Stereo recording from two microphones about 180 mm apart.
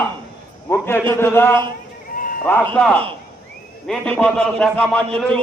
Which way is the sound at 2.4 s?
10° left (ahead or behind).